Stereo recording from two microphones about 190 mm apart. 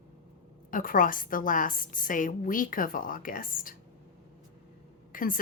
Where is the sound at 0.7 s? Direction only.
45° left (ahead or behind).